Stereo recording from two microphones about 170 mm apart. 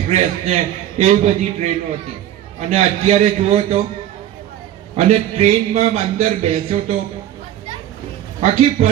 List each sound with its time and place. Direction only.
0.1 s a man's voice: 40° right (ahead or behind)
4.9 s a man's voice: 40° right (ahead or behind)
8.4 s a man's voice: 40° right (ahead or behind)